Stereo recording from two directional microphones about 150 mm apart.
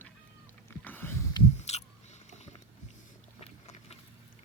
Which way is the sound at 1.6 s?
45° left (ahead or behind).